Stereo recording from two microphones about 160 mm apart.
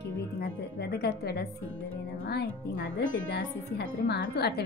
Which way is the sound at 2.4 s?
55° left (ahead or behind).